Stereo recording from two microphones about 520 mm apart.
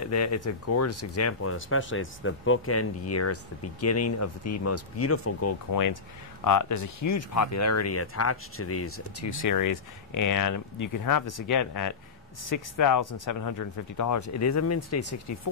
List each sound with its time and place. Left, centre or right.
0.0 s speech: left
9.5 s speech: left